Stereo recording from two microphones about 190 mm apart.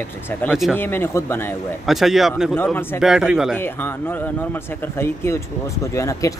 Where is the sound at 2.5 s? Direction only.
10° left (ahead or behind).